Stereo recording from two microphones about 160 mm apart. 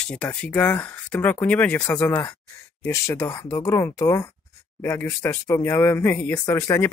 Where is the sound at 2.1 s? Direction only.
25° left (ahead or behind).